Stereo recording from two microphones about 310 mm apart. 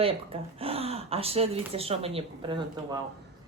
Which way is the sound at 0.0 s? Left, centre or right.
Centre.